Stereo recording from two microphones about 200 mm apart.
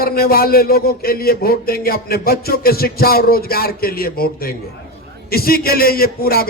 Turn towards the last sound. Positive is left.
turn(degrees=50)  # may be behind; listen again after turning